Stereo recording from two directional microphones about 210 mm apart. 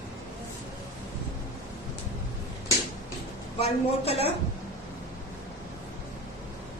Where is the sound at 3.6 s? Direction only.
30° left (ahead or behind).